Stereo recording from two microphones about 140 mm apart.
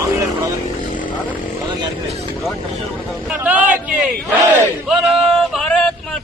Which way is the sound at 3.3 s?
10° right (ahead or behind).